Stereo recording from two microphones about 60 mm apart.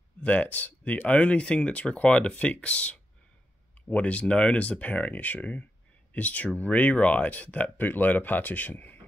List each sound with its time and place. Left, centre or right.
0.2 s speech: left